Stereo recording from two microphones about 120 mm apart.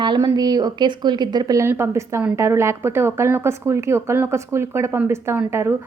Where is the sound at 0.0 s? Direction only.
40° right (ahead or behind).